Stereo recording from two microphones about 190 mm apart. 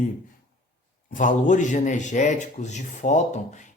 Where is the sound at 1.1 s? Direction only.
40° left (ahead or behind).